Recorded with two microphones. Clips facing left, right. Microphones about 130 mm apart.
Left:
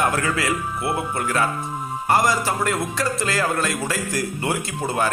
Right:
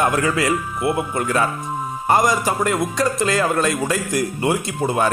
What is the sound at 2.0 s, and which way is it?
A man's voice, 20° right (ahead or behind).